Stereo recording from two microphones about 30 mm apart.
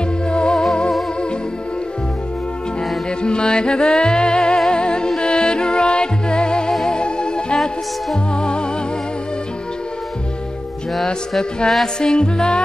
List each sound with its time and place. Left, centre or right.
0.3 s music: left
3.2 s music: left
12.0 s music: left